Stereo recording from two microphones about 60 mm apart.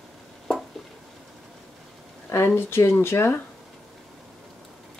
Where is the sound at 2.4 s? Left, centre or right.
Left.